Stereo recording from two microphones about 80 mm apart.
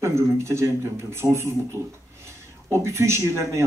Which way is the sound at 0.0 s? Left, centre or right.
Right.